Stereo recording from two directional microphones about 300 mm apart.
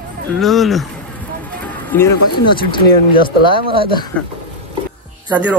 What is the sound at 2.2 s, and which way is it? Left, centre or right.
Speech, left.